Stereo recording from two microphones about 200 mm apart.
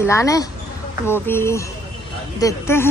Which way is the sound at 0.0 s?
15° left (ahead or behind).